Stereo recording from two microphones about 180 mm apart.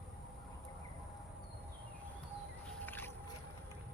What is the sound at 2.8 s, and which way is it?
Boat, 10° left (ahead or behind).